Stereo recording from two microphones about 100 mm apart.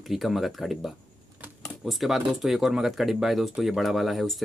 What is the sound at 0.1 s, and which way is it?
Speech, centre (ahead or behind).